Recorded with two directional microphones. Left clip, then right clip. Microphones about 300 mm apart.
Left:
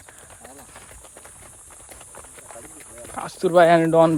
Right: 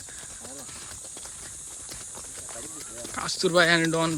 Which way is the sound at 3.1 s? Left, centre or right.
Centre.